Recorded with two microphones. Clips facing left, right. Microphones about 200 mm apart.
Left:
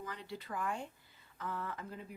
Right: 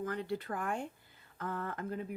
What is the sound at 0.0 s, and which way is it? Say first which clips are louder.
Speech: right 9 dB; 50° right (ahead or behind).